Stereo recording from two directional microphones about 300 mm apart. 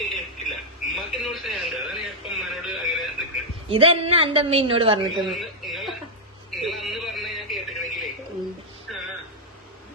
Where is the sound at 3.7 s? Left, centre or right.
Centre.